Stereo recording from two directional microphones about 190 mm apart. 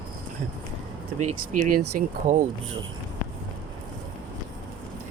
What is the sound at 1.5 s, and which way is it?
Speech, 45° right (ahead or behind).